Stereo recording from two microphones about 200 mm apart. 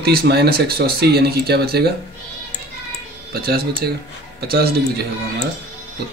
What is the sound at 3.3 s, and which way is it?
Speech, 50° right (ahead or behind).